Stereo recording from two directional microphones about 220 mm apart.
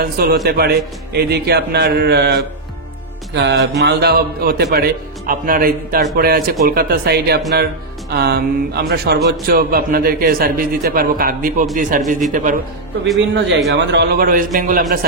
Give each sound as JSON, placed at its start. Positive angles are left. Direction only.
{"t": 0.0, "sound": "a man's voice", "side_deg": -45}
{"t": 13.7, "sound": "a man's voice", "side_deg": -50}